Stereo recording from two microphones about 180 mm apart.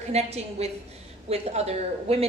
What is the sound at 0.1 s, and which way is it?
A woman's voice, 35° right (ahead or behind).